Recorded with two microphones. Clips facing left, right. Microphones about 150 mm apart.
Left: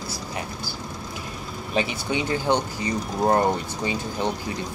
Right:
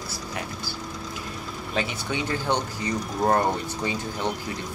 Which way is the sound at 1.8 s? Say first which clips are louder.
Left 3 dB; 15° left (ahead or behind).